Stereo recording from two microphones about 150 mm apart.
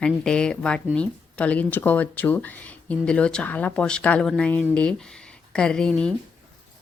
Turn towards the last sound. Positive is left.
turn(degrees=5)  # may be behind; listen again after turning